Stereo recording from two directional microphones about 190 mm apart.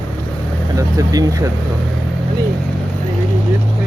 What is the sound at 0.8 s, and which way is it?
Speech, 20° right (ahead or behind).